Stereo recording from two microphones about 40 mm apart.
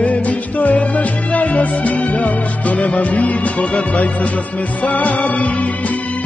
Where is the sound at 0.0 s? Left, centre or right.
Left.